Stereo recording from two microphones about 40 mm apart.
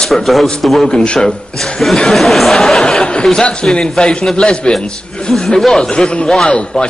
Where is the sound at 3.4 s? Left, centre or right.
Left.